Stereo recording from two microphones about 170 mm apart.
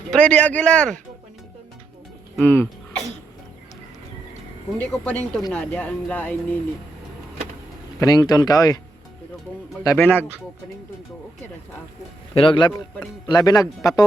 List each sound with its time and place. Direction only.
0.1 s speech: 5° left (ahead or behind)
2.3 s speech: 10° left (ahead or behind)
4.8 s speech: 10° left (ahead or behind)
7.9 s speech: 20° left (ahead or behind)
9.8 s speech: 15° left (ahead or behind)
12.3 s a man's voice: 30° left (ahead or behind)